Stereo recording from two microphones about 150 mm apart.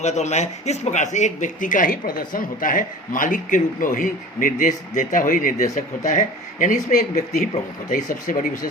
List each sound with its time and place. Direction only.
0.0 s speech: 50° left (ahead or behind)
5.7 s speech: 50° left (ahead or behind)